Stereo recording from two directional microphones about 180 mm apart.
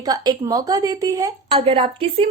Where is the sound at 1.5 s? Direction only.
30° right (ahead or behind).